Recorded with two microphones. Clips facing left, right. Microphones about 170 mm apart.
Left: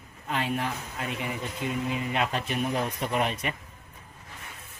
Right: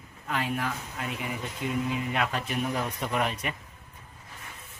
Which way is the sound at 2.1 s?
25° left (ahead or behind).